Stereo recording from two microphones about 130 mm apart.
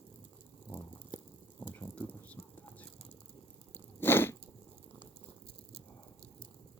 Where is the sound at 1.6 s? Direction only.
15° left (ahead or behind).